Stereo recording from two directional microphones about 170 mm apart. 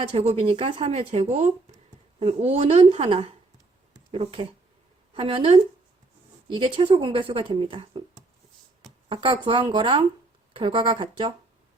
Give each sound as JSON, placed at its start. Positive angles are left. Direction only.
{"t": 0.0, "sound": "a woman's voice", "side_deg": -35}
{"t": 3.9, "sound": "a sound", "side_deg": -30}
{"t": 5.1, "sound": "a woman's voice", "side_deg": -35}
{"t": 9.0, "sound": "a woman's voice", "side_deg": -30}